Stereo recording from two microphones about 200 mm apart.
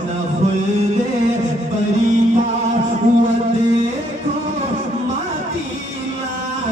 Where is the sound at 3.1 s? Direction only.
35° right (ahead or behind).